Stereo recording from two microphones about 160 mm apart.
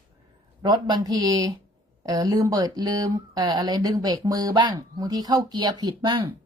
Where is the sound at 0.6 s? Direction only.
25° right (ahead or behind).